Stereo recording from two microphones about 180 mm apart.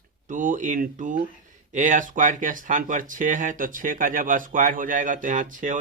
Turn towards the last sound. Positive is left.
turn(degrees=-45)  # may be behind; listen again after turning